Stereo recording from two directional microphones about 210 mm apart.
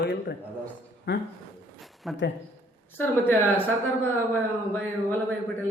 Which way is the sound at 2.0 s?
Centre (ahead or behind).